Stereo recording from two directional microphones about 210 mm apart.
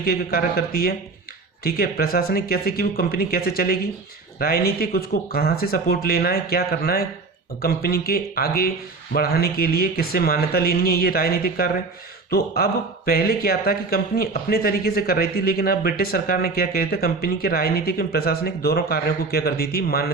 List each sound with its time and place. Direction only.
0.0 s speech: 45° left (ahead or behind)